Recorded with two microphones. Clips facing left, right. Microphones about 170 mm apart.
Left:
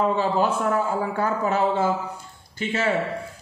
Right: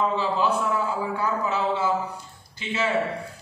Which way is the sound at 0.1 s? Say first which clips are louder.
Left 2 dB; 50° left (ahead or behind).